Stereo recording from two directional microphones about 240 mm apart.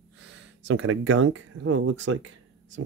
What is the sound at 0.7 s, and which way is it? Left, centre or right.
Speech, right.